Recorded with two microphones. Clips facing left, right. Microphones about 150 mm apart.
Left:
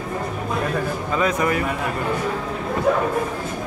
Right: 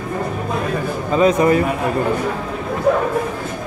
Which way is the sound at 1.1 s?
25° right (ahead or behind).